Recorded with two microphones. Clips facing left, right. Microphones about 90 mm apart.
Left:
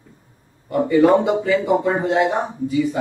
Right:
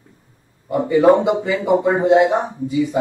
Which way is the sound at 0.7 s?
20° right (ahead or behind).